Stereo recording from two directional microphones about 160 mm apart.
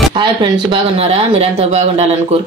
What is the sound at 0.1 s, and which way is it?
A woman's voice, 30° right (ahead or behind).